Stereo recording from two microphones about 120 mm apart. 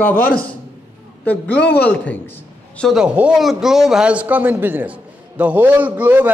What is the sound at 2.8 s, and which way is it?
A man's voice, 5° right (ahead or behind).